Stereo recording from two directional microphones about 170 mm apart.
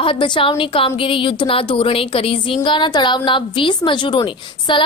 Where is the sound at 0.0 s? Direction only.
30° left (ahead or behind).